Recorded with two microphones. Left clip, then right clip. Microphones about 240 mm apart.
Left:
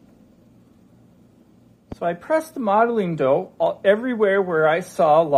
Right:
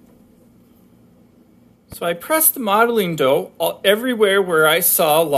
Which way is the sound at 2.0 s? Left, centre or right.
Centre.